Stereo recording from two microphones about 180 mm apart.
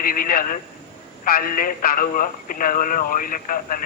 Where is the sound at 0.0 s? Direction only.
50° left (ahead or behind).